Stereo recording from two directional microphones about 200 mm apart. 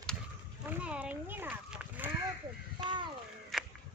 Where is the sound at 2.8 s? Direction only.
20° right (ahead or behind).